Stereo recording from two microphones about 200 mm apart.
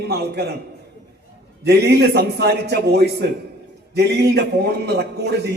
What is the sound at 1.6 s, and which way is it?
A man's voice, 55° right (ahead or behind).